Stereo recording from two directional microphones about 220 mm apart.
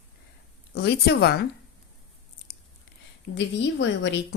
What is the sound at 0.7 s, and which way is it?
Speech, 50° left (ahead or behind).